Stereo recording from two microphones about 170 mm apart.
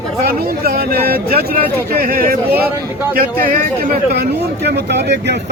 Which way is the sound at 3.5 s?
55° right (ahead or behind).